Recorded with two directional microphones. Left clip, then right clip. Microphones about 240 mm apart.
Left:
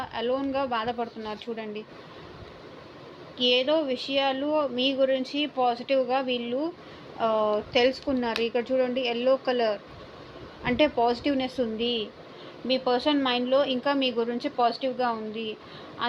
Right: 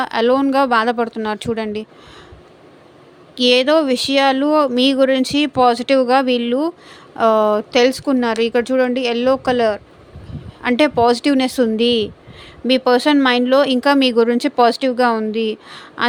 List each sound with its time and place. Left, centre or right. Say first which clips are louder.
0.0 s speech: right 13 dB; right
3.3 s speech: right 10 dB; right